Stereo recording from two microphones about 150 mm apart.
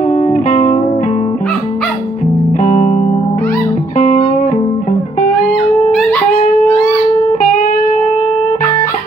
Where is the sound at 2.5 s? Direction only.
60° left (ahead or behind).